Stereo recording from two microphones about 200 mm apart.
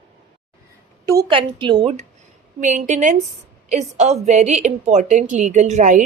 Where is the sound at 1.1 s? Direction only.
20° right (ahead or behind).